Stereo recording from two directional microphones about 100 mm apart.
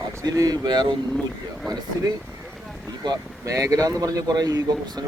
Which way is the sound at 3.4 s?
30° right (ahead or behind).